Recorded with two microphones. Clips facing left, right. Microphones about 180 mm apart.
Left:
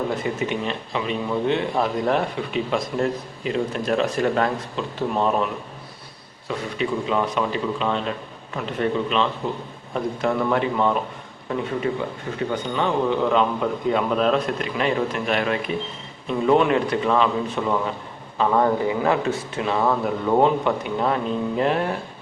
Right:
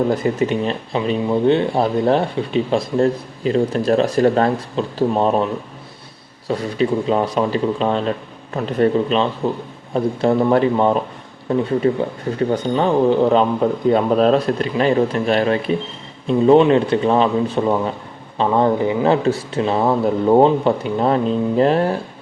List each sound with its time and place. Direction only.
0.1 s speech: 35° right (ahead or behind)
6.5 s speech: 35° right (ahead or behind)
18.3 s speech: 25° right (ahead or behind)